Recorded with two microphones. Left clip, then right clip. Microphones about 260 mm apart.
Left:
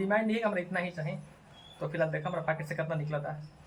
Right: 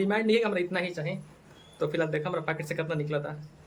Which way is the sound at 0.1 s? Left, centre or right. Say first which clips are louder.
Right 2 dB; centre.